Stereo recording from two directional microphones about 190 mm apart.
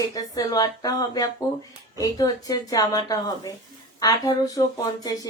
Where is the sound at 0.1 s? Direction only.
20° left (ahead or behind).